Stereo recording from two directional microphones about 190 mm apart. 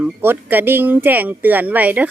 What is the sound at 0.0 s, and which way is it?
A woman's voice, 10° right (ahead or behind).